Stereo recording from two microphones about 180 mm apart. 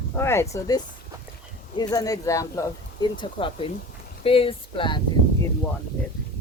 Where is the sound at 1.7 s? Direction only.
20° left (ahead or behind).